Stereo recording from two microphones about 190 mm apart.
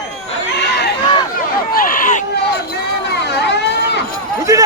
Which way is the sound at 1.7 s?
45° left (ahead or behind).